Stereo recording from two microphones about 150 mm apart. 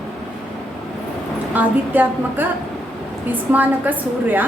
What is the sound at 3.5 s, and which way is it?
Speech, 10° right (ahead or behind).